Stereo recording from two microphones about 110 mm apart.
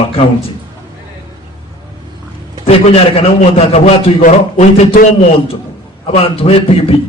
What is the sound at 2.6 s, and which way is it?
A man's voice, 65° left (ahead or behind).